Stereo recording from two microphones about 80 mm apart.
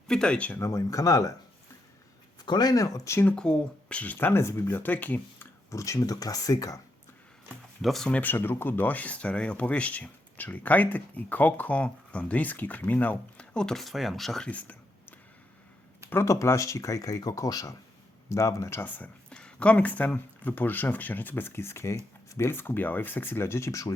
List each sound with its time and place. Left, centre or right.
0.1 s speech: centre
0.5 s speech: left
2.4 s speech: left
3.3 s speech: centre
5.7 s speech: left
7.8 s speech: centre
8.1 s speech: left; by 14.5 s centre
16.0 s speech: left
19.3 s speech: centre; by 23.9 s left